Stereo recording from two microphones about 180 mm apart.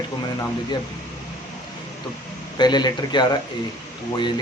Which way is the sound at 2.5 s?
25° left (ahead or behind).